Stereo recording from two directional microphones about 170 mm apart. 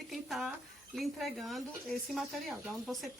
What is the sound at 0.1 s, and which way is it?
Speech, centre (ahead or behind).